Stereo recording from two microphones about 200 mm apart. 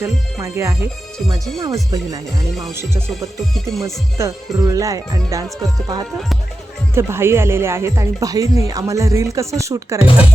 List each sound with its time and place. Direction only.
0.0 s speech: 15° right (ahead or behind)
3.1 s music: centre (ahead or behind)
4.2 s speech: 15° right (ahead or behind)
6.9 s speech: 10° right (ahead or behind)